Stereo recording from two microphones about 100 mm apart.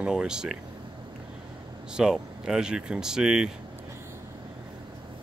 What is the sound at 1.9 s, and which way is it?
Speech, 5° right (ahead or behind).